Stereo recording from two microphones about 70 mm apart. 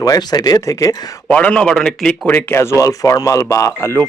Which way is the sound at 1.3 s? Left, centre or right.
Centre.